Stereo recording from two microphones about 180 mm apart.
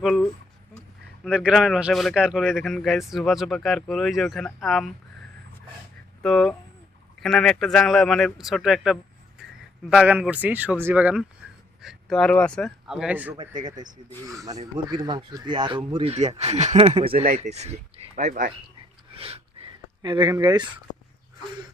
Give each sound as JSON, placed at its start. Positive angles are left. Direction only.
{"t": 0.0, "sound": "speech", "side_deg": 0}
{"t": 6.2, "sound": "speech", "side_deg": 5}
{"t": 13.4, "sound": "speech", "side_deg": -45}
{"t": 14.3, "sound": "speech", "side_deg": -20}
{"t": 16.1, "sound": "speech", "side_deg": -40}
{"t": 19.1, "sound": "a sound", "side_deg": -30}
{"t": 20.4, "sound": "speech", "side_deg": -25}